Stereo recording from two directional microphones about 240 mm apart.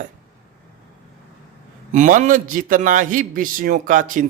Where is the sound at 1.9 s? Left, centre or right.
Right.